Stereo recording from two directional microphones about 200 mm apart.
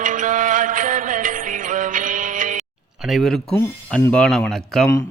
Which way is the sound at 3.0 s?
Centre (ahead or behind).